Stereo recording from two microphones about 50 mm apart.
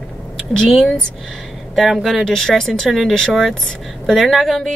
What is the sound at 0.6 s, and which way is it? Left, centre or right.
Speech, centre.